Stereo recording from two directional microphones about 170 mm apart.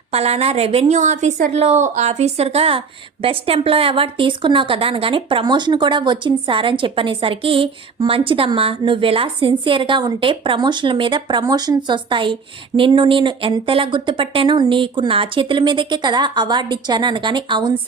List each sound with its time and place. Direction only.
0.1 s a woman's voice: 35° right (ahead or behind)